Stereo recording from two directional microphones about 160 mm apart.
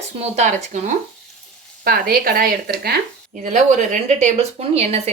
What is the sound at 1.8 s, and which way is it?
Speech, 70° right (ahead or behind).